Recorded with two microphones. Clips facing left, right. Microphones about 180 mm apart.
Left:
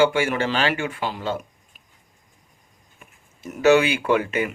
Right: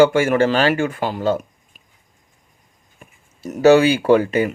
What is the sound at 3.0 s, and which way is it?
Speech, 35° right (ahead or behind).